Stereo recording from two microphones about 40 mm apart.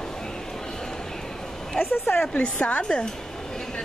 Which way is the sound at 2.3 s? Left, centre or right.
Left.